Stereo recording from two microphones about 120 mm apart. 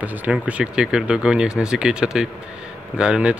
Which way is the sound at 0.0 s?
15° right (ahead or behind).